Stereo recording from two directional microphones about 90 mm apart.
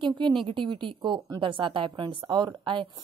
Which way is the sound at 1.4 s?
70° right (ahead or behind).